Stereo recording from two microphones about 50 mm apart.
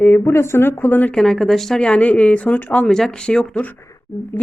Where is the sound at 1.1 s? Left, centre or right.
Centre.